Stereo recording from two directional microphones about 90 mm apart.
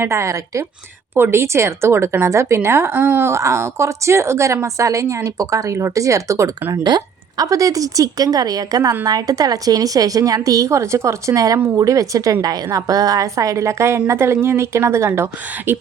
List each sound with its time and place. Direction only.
0.0 s a woman's voice: 35° right (ahead or behind)
1.1 s a woman's voice: 25° right (ahead or behind)
6.8 s a woman's voice: 50° right (ahead or behind); by 15.8 s 25° right (ahead or behind)